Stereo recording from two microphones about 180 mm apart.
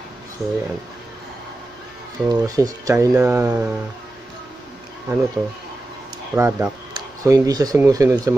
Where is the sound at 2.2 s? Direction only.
20° right (ahead or behind).